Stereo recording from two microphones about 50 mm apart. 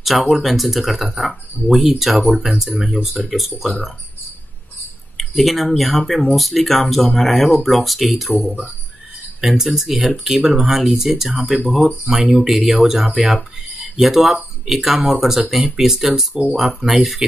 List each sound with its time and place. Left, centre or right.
0.0 s speech: centre
5.1 s speech: centre
8.5 s speech: right
9.4 s speech: centre
15.0 s speech: right